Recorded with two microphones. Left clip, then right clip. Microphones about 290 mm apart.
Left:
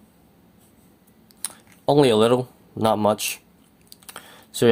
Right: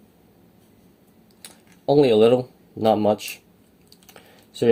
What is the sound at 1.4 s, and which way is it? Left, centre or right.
Speech, centre.